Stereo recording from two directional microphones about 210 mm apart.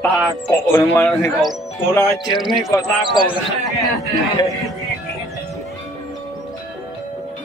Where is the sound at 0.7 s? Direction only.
10° left (ahead or behind).